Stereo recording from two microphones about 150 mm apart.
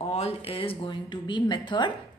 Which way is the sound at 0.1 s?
40° left (ahead or behind).